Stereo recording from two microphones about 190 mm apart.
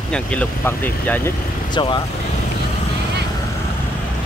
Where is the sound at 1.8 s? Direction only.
25° left (ahead or behind).